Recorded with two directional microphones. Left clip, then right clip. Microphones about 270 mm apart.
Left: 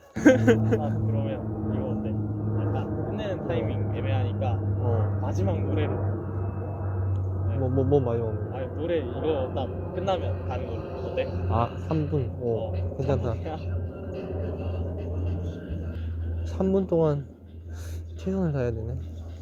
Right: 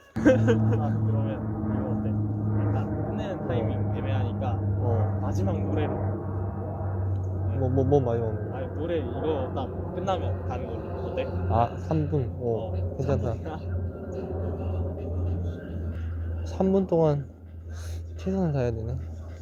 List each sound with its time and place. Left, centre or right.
0.2 s speech: left
1.1 s vehicle: right
5.2 s speech: centre
7.6 s speech: centre
8.5 s vehicle: right
9.2 s speech: right
10.8 s a man's voice: centre
12.1 s speech: centre
14.1 s music: centre
16.6 s speech: centre
18.3 s speech: centre